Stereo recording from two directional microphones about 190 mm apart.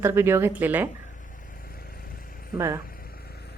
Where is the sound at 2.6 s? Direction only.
15° right (ahead or behind).